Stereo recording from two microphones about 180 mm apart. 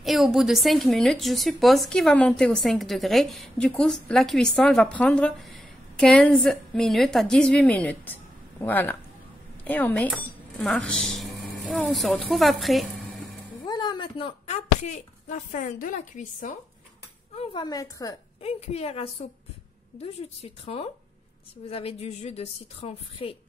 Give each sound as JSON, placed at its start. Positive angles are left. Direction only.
{"t": 0.0, "sound": "a woman's voice", "side_deg": 0}
{"t": 13.7, "sound": "speech", "side_deg": 25}
{"t": 17.4, "sound": "a woman's voice", "side_deg": 30}
{"t": 18.4, "sound": "a woman's voice", "side_deg": 35}
{"t": 20.6, "sound": "a woman's voice", "side_deg": 35}